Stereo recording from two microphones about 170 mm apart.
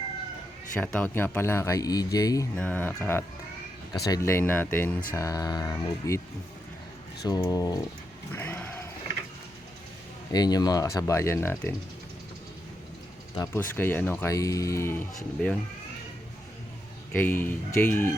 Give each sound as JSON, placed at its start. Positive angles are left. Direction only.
{"t": 0.8, "sound": "speech", "side_deg": 10}
{"t": 2.6, "sound": "speech", "side_deg": 10}
{"t": 7.3, "sound": "speech", "side_deg": 20}
{"t": 8.3, "sound": "a sound", "side_deg": 10}
{"t": 10.3, "sound": "speech", "side_deg": 25}
{"t": 13.3, "sound": "speech", "side_deg": 20}
{"t": 17.1, "sound": "speech", "side_deg": 10}